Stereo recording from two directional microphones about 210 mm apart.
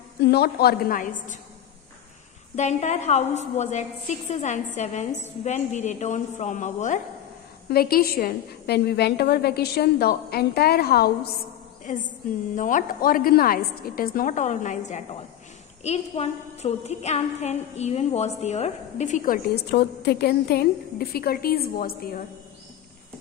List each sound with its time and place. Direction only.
0.2 s a woman's voice: 50° left (ahead or behind)
2.5 s a woman's voice: 30° left (ahead or behind)
7.7 s a woman's voice: 45° left (ahead or behind)
11.8 s a sound: 40° left (ahead or behind)
12.5 s a woman's voice: 40° left (ahead or behind)